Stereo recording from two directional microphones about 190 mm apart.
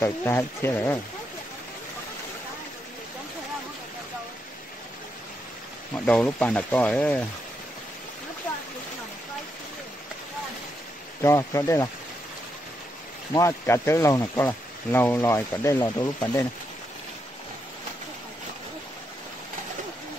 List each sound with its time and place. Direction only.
0.0 s speech: 15° left (ahead or behind)
6.0 s speech: 5° left (ahead or behind)
11.2 s speech: 15° left (ahead or behind)
13.3 s speech: 15° left (ahead or behind)